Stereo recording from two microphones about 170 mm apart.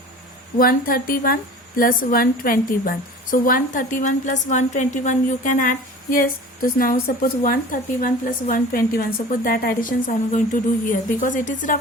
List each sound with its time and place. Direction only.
0.6 s a woman's voice: 60° left (ahead or behind)